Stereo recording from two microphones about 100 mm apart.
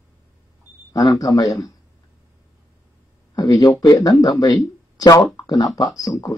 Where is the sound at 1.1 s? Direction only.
40° left (ahead or behind).